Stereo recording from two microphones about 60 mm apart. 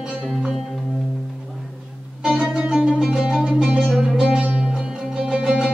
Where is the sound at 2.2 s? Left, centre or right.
Centre.